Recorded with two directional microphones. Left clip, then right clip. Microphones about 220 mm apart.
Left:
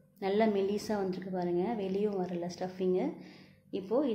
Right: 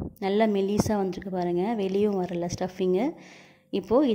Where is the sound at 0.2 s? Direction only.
40° right (ahead or behind).